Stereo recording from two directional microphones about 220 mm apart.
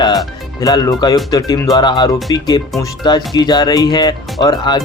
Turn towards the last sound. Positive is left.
turn(degrees=20)  # may be behind; listen again after turning